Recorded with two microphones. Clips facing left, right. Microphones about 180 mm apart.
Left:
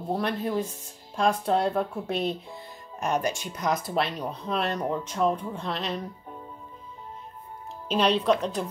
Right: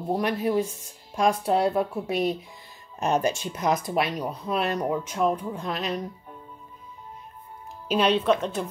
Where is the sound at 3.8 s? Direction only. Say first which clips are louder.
Right 2 dB; 10° right (ahead or behind).